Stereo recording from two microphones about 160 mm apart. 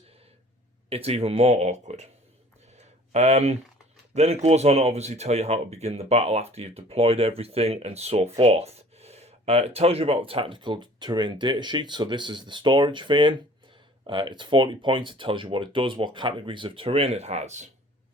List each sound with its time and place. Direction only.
0.9 s speech: 40° right (ahead or behind)
3.1 s speech: 45° right (ahead or behind)